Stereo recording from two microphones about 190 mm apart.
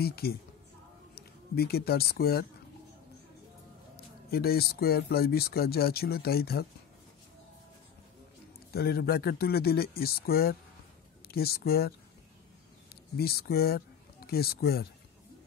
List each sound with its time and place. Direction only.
0.0 s speech: 55° left (ahead or behind)
3.9 s speech: 55° left (ahead or behind)
8.7 s speech: 55° left (ahead or behind)
13.2 s speech: 55° left (ahead or behind)